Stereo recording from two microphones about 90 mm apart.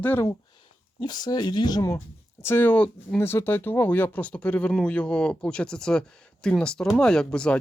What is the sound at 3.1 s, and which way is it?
Speech, 25° left (ahead or behind).